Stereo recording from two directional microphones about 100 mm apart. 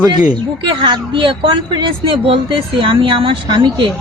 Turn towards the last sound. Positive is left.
turn(degrees=-50)  # may be behind; listen again after turning